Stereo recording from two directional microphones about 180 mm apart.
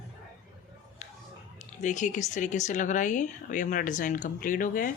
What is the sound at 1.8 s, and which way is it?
Speech, 45° left (ahead or behind).